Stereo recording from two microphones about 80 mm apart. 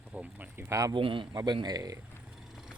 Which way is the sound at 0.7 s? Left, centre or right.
Right.